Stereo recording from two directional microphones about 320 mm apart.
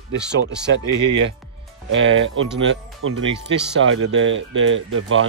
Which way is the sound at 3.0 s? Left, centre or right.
Right.